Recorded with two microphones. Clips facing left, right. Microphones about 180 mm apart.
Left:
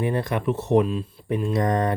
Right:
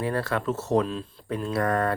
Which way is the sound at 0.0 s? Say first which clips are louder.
Left 3 dB; 20° left (ahead or behind).